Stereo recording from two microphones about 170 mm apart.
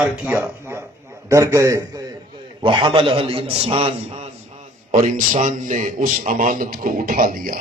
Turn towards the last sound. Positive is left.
turn(degrees=-55)  # may be behind; listen again after turning